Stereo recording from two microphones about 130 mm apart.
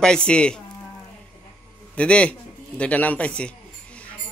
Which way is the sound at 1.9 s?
10° left (ahead or behind).